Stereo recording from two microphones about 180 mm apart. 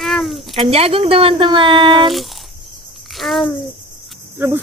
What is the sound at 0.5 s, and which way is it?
Speech, 35° right (ahead or behind).